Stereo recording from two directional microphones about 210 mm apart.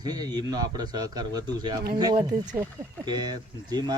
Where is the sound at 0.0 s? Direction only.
20° right (ahead or behind).